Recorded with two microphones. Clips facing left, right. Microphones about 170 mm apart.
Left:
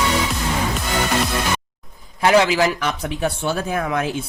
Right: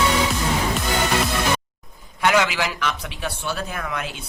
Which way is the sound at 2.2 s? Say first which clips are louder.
Left 5 dB; 35° left (ahead or behind).